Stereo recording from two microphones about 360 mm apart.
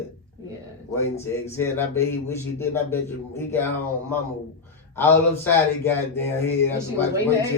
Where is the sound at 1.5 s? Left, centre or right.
Centre.